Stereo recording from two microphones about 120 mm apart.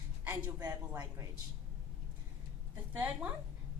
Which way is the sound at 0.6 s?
35° right (ahead or behind).